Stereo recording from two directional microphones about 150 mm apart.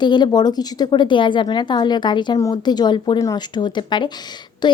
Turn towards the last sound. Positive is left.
turn(degrees=30)  # may be behind; listen again after turning